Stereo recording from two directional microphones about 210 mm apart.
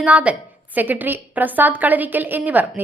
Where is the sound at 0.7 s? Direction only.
10° right (ahead or behind).